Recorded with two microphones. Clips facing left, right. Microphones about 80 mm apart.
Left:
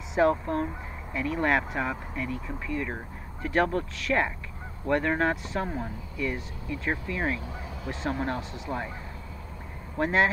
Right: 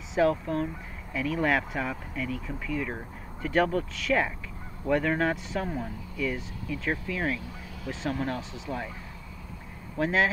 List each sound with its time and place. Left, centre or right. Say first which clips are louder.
0.3 s speech: left 1 dB; centre
9.9 s speech: left 1 dB; centre